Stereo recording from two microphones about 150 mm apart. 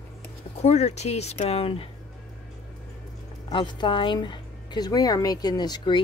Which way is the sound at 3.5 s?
30° left (ahead or behind).